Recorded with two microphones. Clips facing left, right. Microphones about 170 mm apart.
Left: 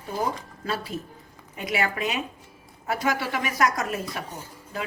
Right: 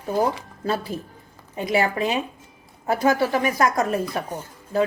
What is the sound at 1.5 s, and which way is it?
A woman's voice, 30° right (ahead or behind).